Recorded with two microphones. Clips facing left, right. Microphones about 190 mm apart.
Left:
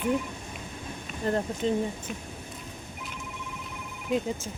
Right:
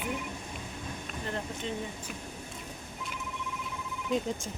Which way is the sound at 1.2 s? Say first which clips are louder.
Left 10 dB; 40° left (ahead or behind).